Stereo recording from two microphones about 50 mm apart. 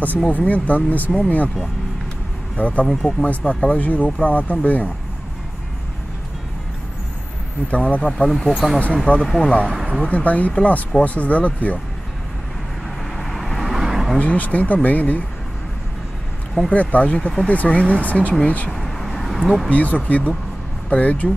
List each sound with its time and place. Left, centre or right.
0.3 s speech: left
2.5 s speech: left
2.9 s speech: centre
3.3 s speech: left
7.6 s speech: left
8.3 s speech: centre
9.0 s speech: left
13.2 s vehicle: centre
14.1 s speech: left
16.7 s speech: left
18.8 s a sound: centre
19.4 s speech: centre
19.7 s speech: left